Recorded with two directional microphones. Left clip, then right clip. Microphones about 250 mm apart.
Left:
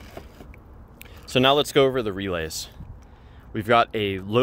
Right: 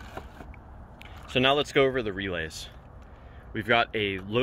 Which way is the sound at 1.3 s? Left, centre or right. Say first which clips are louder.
Left 4 dB; left.